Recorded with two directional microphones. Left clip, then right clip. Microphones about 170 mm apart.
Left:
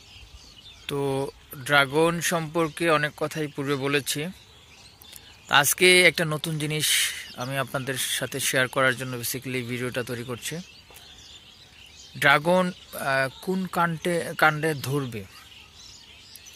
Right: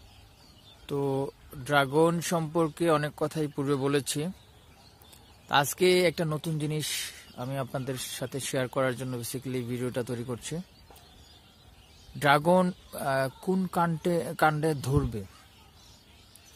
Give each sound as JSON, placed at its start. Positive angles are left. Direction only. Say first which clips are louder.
{"t": 0.8, "sound": "speech", "louder": "left 3 dB", "side_deg": -10}
{"t": 5.5, "sound": "speech", "louder": "left 6 dB", "side_deg": -10}
{"t": 12.2, "sound": "speech", "louder": "left 3 dB", "side_deg": -20}
{"t": 14.9, "sound": "speech", "louder": "left 1 dB", "side_deg": -10}